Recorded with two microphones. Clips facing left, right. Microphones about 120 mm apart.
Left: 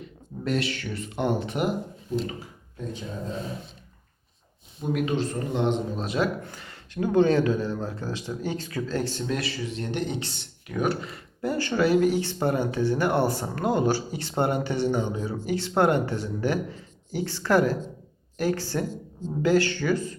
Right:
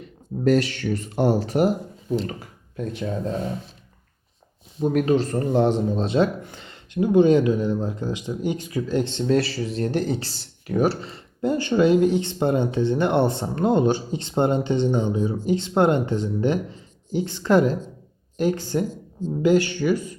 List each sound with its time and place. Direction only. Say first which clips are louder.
0.0 s speech: right 10 dB; 40° right (ahead or behind)
2.4 s speech: right 6 dB; 70° right (ahead or behind)
4.8 s speech: right 6 dB; 40° right (ahead or behind); by 9.2 s 20° right (ahead or behind)
9.2 s speech: right 8 dB; 35° right (ahead or behind); by 20.1 s 15° right (ahead or behind)